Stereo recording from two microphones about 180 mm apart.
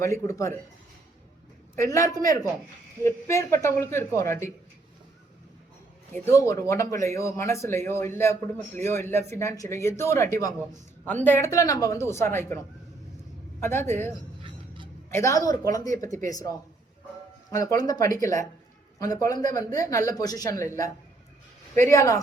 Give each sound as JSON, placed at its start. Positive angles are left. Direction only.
{"t": 0.0, "sound": "speech", "side_deg": 15}
{"t": 1.8, "sound": "a woman's voice", "side_deg": 15}
{"t": 6.1, "sound": "speech", "side_deg": 15}
{"t": 13.6, "sound": "speech", "side_deg": 15}
{"t": 14.4, "sound": "music", "side_deg": -25}
{"t": 15.1, "sound": "a woman's voice", "side_deg": 15}
{"t": 17.5, "sound": "a woman's voice", "side_deg": 20}